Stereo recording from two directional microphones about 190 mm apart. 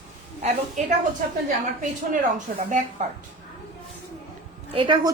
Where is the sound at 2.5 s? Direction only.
50° right (ahead or behind).